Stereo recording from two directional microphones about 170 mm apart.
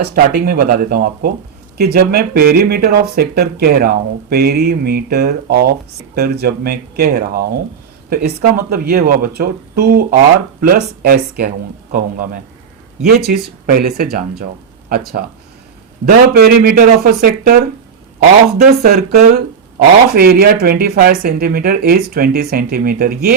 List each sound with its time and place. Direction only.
0.0 s speech: 60° right (ahead or behind)
13.1 s speech: 65° right (ahead or behind)